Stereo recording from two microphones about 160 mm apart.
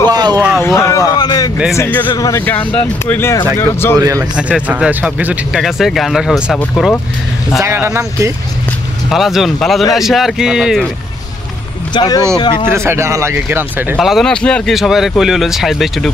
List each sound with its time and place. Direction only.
0.1 s a sound: 25° right (ahead or behind)
0.6 s a sound: 15° left (ahead or behind)
1.8 s speech: 10° left (ahead or behind)
4.0 s a man's voice: 20° right (ahead or behind)
4.4 s speech: 5° right (ahead or behind)
7.6 s speech: 15° right (ahead or behind)
9.1 s speech: centre (ahead or behind)
11.9 s speech: 25° left (ahead or behind)
12.7 s speech: 15° right (ahead or behind)
13.9 s speech: centre (ahead or behind)